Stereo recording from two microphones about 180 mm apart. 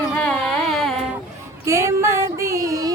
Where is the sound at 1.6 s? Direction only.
15° right (ahead or behind).